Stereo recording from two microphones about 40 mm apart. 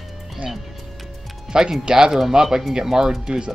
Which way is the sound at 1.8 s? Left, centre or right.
Centre.